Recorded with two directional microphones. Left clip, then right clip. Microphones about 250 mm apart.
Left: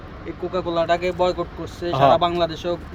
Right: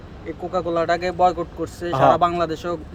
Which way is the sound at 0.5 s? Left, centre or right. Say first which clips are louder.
Even; centre.